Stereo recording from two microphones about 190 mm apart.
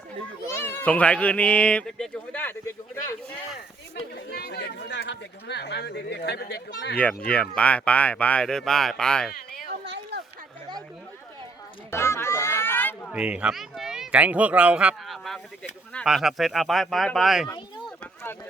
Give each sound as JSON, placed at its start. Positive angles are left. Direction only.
{"t": 0.5, "sound": "cat", "side_deg": 10}
{"t": 4.1, "sound": "speech", "side_deg": 55}
{"t": 7.3, "sound": "speech", "side_deg": 5}
{"t": 9.8, "sound": "a sound", "side_deg": -65}
{"t": 11.9, "sound": "music", "side_deg": 15}
{"t": 13.1, "sound": "speech", "side_deg": -5}
{"t": 18.0, "sound": "a sound", "side_deg": 10}